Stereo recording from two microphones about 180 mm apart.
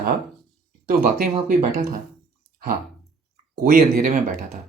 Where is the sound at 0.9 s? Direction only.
55° right (ahead or behind).